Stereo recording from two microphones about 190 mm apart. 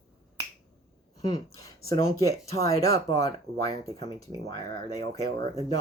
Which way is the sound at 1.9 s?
15° left (ahead or behind).